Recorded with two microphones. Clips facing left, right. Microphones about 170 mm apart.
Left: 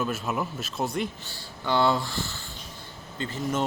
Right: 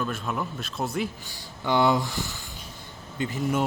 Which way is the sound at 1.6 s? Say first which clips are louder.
Right 2 dB; 15° right (ahead or behind).